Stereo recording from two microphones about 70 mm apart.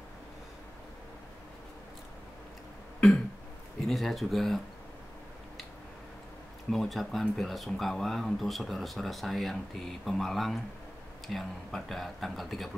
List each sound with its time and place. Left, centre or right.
3.8 s speech: centre
6.7 s speech: centre